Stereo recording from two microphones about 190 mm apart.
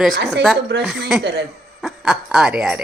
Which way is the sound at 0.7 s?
65° right (ahead or behind).